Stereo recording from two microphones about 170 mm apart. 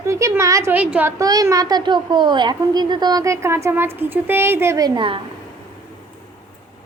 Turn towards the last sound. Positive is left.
turn(degrees=-30)  # may be behind; listen again after turning